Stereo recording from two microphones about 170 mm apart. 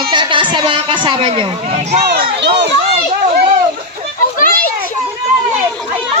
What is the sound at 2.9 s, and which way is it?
Children playing, 55° right (ahead or behind).